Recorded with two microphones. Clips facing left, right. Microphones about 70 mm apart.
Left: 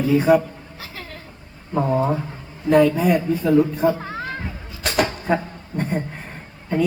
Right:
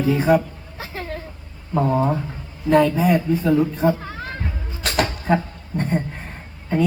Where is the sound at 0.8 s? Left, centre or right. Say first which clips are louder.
Right 8 dB; right.